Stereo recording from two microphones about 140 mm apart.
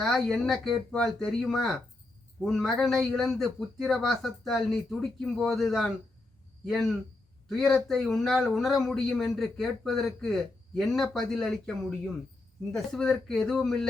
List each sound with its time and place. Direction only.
0.0 s speech: centre (ahead or behind)